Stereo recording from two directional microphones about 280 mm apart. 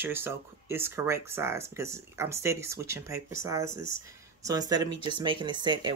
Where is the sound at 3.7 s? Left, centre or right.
Left.